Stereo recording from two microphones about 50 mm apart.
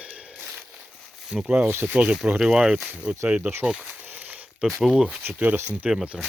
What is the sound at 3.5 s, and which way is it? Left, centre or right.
Speech, right.